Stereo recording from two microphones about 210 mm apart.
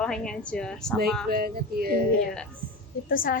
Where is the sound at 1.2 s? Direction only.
45° right (ahead or behind).